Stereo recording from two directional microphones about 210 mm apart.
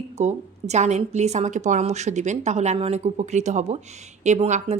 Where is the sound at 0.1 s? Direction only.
30° right (ahead or behind).